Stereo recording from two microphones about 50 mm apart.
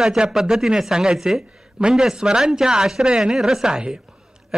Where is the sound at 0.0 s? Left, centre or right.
Centre.